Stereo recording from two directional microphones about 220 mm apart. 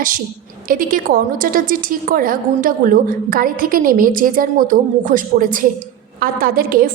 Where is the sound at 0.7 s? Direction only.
40° right (ahead or behind).